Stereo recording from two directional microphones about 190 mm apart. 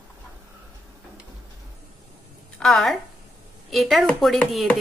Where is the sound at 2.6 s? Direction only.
Centre (ahead or behind).